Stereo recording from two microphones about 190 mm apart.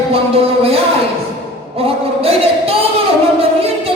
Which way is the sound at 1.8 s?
30° right (ahead or behind).